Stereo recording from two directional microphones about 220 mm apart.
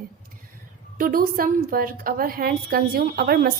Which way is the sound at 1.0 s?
40° right (ahead or behind).